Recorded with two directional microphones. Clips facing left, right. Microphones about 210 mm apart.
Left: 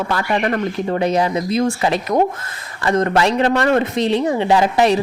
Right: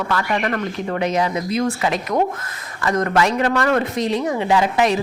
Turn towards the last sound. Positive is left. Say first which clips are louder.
# left 3 dB
turn(degrees=35)  # may be behind; listen again after turning